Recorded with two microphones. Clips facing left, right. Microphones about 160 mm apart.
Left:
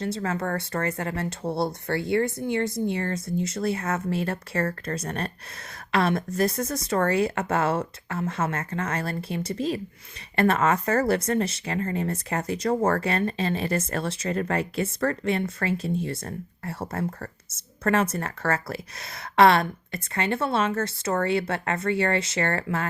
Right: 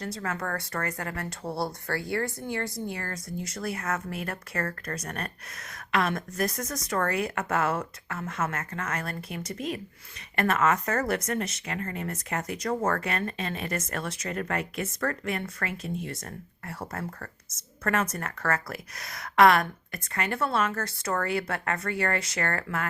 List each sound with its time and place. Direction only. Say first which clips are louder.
0.0 s speech: left 5 dB; 25° left (ahead or behind)